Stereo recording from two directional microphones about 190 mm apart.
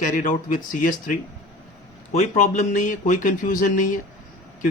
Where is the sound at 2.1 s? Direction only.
40° left (ahead or behind).